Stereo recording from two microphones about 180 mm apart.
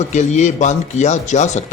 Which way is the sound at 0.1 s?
40° left (ahead or behind).